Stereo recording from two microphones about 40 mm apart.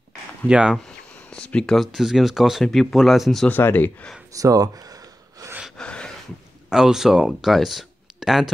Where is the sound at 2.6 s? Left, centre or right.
Centre.